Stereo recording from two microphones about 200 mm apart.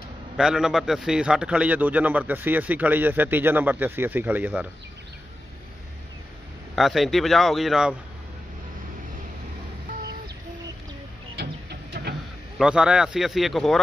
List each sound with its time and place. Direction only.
0.4 s a man's voice: 5° right (ahead or behind)
6.7 s speech: centre (ahead or behind)
11.9 s printer: 55° right (ahead or behind)
12.5 s speech: 5° right (ahead or behind)